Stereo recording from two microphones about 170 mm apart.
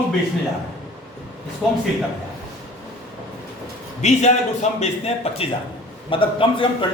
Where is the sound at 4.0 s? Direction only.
40° left (ahead or behind).